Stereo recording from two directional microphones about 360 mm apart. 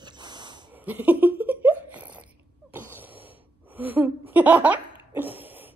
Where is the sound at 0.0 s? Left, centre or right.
Centre.